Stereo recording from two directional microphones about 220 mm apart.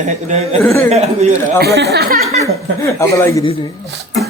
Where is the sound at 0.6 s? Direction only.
10° left (ahead or behind).